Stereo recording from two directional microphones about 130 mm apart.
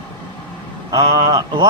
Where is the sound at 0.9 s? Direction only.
30° right (ahead or behind).